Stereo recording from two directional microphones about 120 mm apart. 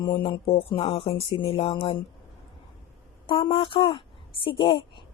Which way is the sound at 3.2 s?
45° left (ahead or behind).